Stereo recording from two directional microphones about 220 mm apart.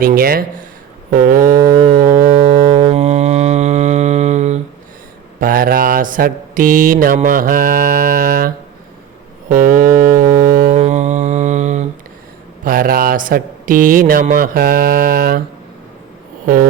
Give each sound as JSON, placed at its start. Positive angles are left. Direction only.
{"t": 0.0, "sound": "speech", "side_deg": -40}
{"t": 1.9, "sound": "a sound", "side_deg": -40}
{"t": 2.3, "sound": "music", "side_deg": -25}
{"t": 5.4, "sound": "mantra", "side_deg": -40}
{"t": 9.5, "sound": "music", "side_deg": -40}
{"t": 10.8, "sound": "mantra", "side_deg": -30}
{"t": 12.6, "sound": "speech", "side_deg": -40}